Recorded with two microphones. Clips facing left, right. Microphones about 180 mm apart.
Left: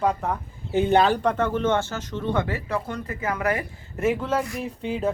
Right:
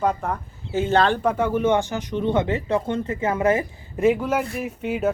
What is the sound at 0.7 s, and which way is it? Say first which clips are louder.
Speech: left 1 dB; 15° left (ahead or behind).